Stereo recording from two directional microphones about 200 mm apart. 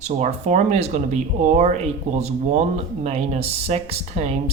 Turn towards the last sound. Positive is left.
turn(degrees=-35)  # may be behind; listen again after turning